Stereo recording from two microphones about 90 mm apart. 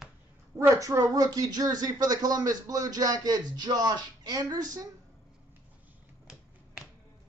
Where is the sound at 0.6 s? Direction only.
35° right (ahead or behind).